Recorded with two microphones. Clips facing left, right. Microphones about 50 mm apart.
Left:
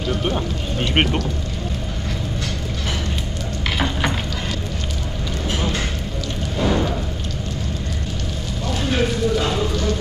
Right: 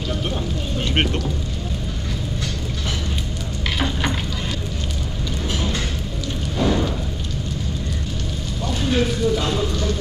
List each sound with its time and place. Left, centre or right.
0.2 s speech: centre
6.6 s a sound: centre
8.8 s clip-clop: centre
9.4 s speech: centre